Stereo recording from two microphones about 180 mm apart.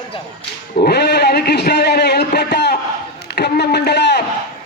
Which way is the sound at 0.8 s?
65° left (ahead or behind).